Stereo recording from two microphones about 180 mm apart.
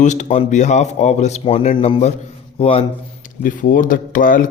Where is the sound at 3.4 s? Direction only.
50° left (ahead or behind).